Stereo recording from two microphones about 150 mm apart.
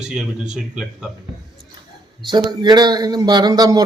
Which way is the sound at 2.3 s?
30° right (ahead or behind).